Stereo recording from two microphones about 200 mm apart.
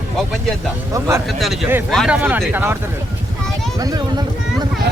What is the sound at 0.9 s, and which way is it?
Speech, 15° right (ahead or behind).